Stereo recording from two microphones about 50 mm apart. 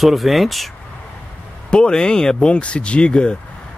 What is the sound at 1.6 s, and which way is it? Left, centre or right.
Speech, centre.